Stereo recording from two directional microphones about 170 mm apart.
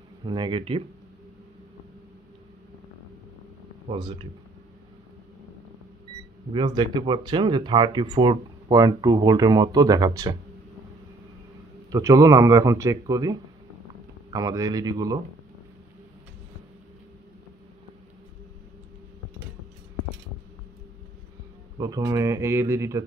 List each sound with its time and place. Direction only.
0.2 s speech: 25° right (ahead or behind)
3.9 s speech: 30° right (ahead or behind)
6.5 s speech: 25° right (ahead or behind)
11.9 s speech: 20° right (ahead or behind)
21.7 s speech: 20° right (ahead or behind)